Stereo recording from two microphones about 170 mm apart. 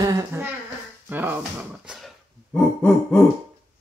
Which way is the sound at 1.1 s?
10° right (ahead or behind).